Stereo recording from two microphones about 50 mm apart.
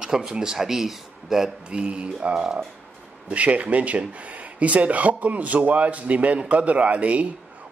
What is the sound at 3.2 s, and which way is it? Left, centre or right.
Speech, right.